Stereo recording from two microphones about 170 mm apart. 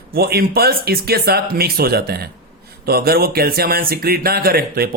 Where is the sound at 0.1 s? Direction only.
65° right (ahead or behind).